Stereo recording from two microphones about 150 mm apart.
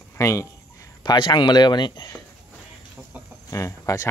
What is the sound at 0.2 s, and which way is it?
Speech, 20° left (ahead or behind).